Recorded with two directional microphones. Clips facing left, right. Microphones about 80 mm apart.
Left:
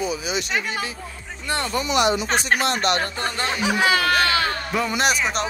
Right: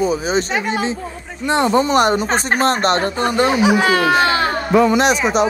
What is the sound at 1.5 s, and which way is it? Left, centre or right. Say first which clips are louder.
Speech: right 10 dB; right.